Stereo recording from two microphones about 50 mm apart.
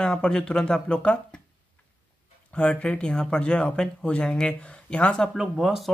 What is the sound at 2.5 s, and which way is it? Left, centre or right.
Speech, left.